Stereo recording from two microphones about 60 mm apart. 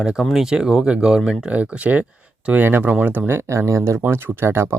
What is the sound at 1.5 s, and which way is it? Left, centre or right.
Speech, right.